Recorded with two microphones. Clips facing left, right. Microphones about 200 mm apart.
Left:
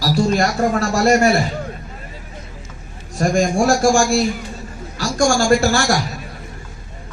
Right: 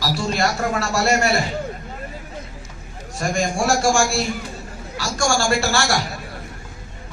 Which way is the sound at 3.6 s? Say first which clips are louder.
Left 3 dB; 35° left (ahead or behind).